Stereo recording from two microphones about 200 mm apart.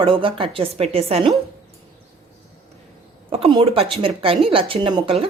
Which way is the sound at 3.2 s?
30° right (ahead or behind).